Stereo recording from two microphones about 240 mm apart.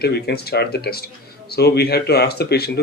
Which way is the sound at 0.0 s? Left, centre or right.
Left.